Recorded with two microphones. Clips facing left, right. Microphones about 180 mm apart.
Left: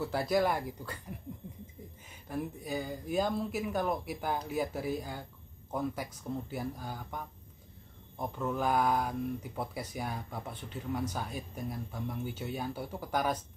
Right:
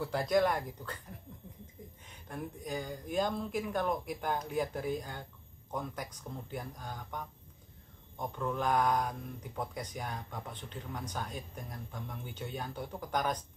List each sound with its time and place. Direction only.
0.0 s speech: 5° left (ahead or behind)
2.2 s speech: 5° left (ahead or behind)